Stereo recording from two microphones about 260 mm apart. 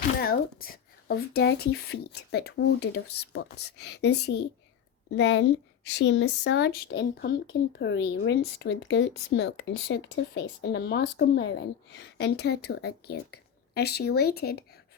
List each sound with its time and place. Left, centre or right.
0.2 s a woman's voice: left